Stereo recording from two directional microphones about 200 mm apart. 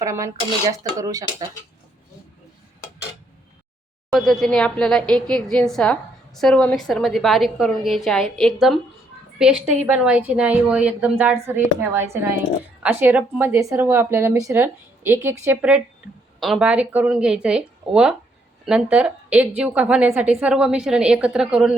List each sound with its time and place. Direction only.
0.0 s speech: 15° right (ahead or behind)
4.1 s a woman's voice: centre (ahead or behind)